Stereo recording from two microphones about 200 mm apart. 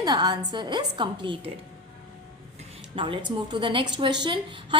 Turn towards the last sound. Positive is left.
turn(degrees=-25)  # may be behind; listen again after turning